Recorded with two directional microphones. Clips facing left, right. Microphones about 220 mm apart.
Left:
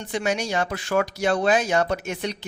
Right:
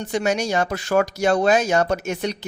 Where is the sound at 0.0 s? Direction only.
45° right (ahead or behind).